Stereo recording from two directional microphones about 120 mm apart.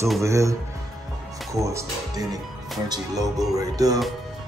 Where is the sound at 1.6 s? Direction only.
25° right (ahead or behind).